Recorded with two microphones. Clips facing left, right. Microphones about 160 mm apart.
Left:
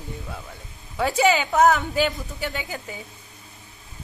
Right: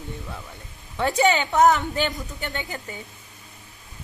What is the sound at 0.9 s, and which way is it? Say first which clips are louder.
Speech: even; centre (ahead or behind).